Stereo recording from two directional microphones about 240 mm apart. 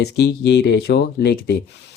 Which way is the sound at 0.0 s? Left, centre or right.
Left.